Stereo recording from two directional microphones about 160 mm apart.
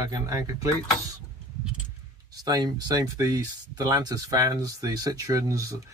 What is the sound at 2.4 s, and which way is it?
Speech, 25° right (ahead or behind).